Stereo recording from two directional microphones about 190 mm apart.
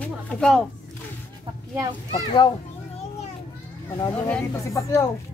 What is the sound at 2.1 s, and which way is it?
Speech, 25° left (ahead or behind).